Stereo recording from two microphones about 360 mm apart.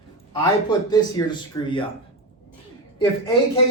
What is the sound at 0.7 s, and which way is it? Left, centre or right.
Speech, centre.